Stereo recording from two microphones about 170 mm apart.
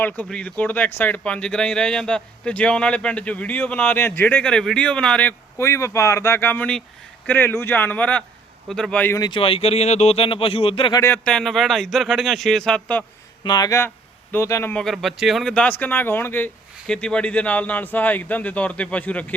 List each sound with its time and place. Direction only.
0.0 s speech: 5° left (ahead or behind)
9.2 s speech: 30° left (ahead or behind)
11.0 s speech: 10° left (ahead or behind)
13.4 s speech: 25° left (ahead or behind); by 19.2 s 10° left (ahead or behind)